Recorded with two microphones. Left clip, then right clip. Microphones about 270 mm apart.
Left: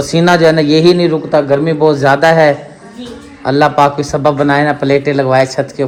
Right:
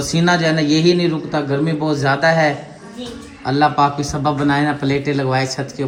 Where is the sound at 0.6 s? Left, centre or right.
Centre.